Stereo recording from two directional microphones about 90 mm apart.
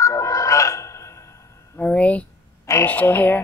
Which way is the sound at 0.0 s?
35° left (ahead or behind).